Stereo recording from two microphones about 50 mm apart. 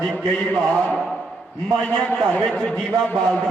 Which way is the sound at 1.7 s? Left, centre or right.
Left.